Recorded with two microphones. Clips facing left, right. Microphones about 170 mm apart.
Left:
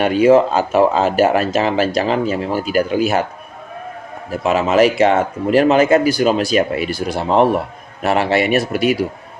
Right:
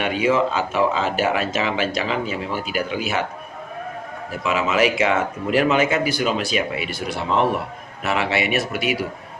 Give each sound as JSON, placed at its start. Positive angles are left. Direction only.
{"t": 0.0, "sound": "speech", "side_deg": 40}
{"t": 4.3, "sound": "speech", "side_deg": 40}